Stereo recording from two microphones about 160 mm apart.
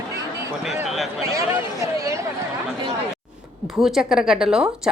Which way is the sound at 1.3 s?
20° right (ahead or behind).